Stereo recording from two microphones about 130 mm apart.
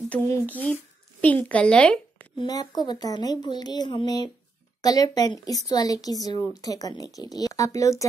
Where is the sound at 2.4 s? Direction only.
30° left (ahead or behind).